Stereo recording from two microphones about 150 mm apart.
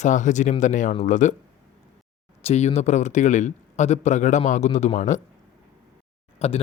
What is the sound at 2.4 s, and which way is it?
Speech, 45° left (ahead or behind).